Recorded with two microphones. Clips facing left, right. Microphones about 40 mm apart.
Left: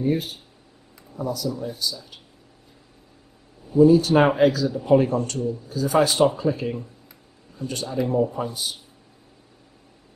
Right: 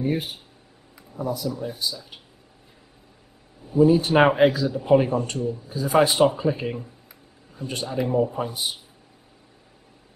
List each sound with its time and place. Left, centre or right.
0.0 s speech: right
3.7 s speech: right